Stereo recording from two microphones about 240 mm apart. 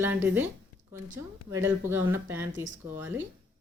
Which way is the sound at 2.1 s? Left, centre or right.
Centre.